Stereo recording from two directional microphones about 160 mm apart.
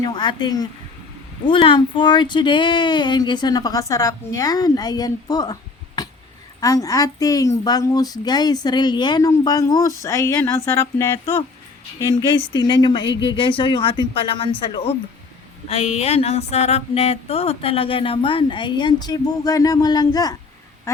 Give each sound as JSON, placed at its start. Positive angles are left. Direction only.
{"t": 0.0, "sound": "a woman's voice", "side_deg": 25}
{"t": 6.6, "sound": "a woman's voice", "side_deg": 20}
{"t": 12.5, "sound": "a sound", "side_deg": 25}
{"t": 20.9, "sound": "quack", "side_deg": 20}